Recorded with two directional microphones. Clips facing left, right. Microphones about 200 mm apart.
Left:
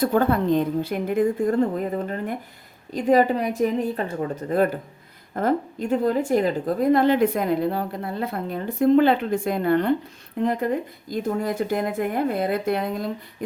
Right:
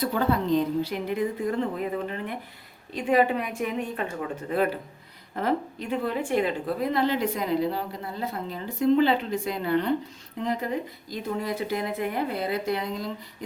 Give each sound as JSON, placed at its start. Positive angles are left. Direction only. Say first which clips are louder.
{"t": 0.0, "sound": "speech", "louder": "left 5 dB", "side_deg": 50}